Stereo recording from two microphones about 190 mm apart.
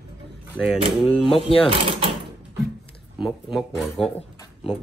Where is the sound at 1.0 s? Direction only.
30° left (ahead or behind).